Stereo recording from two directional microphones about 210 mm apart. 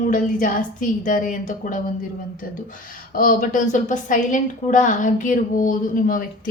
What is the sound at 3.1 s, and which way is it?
A woman's voice, 40° left (ahead or behind).